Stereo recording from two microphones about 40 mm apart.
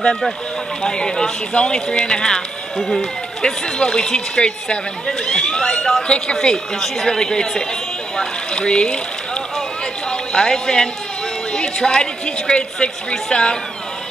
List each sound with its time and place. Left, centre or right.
0.0 s a woman's voice: centre
2.8 s speech: centre
3.4 s a woman's voice: centre
6.0 s a woman's voice: left
6.8 s a woman's voice: centre